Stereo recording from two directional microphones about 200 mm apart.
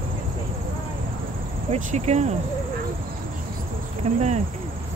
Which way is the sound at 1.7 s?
35° right (ahead or behind).